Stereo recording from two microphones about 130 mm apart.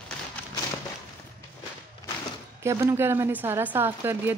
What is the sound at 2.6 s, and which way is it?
Speech, 25° right (ahead or behind).